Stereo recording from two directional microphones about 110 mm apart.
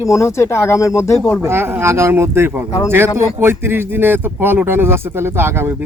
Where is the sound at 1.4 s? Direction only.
20° right (ahead or behind).